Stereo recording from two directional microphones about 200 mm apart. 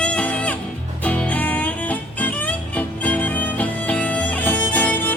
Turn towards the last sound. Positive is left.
turn(degrees=10)  # may be behind; listen again after turning